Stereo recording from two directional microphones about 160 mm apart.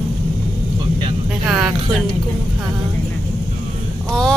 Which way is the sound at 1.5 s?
5° right (ahead or behind).